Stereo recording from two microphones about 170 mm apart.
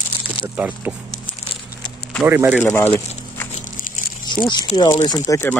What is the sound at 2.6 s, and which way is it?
Speech, 15° left (ahead or behind).